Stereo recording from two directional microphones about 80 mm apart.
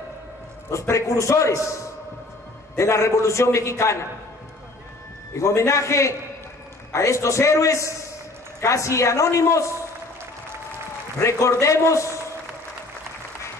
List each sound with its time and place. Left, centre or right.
0.7 s a man's voice: left
5.3 s a man's voice: left
11.1 s a man's voice: left